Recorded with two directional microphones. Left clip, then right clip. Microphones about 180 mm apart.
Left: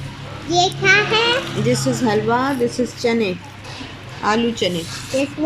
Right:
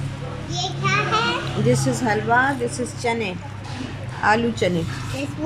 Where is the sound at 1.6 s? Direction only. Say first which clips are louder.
Right 2 dB; 5° left (ahead or behind).